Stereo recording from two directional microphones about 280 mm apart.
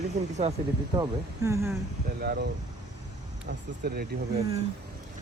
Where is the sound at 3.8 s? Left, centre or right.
Right.